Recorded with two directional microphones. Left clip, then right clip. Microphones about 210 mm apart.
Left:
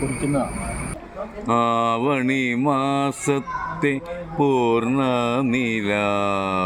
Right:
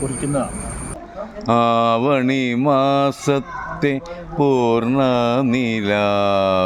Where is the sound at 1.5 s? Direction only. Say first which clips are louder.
Right 4 dB; 50° right (ahead or behind).